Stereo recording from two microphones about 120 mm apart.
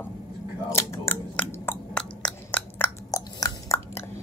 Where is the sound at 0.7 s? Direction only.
20° left (ahead or behind).